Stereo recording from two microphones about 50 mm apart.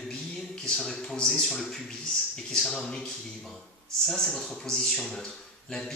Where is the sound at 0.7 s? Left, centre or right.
Centre.